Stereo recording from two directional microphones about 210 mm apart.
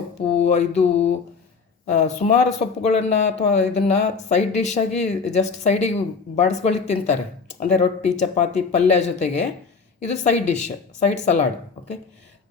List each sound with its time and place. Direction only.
0.4 s speech: 30° left (ahead or behind)